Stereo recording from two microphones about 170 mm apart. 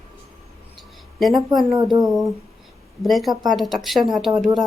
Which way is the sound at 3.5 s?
Centre (ahead or behind).